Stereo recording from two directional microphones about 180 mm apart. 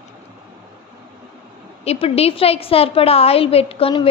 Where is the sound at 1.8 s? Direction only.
35° left (ahead or behind).